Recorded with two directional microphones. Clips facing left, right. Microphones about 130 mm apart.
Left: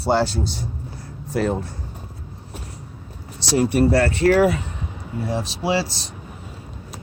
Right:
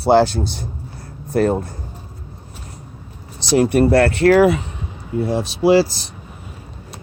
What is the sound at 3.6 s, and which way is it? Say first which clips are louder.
Speech: right 4 dB; 60° right (ahead or behind).